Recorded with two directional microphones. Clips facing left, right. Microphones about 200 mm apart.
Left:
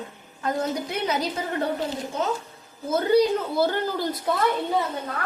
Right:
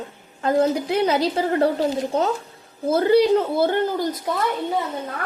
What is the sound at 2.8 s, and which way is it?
A woman's voice, 30° right (ahead or behind).